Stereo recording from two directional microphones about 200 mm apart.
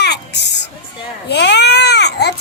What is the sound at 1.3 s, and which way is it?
Baby cry, 60° left (ahead or behind).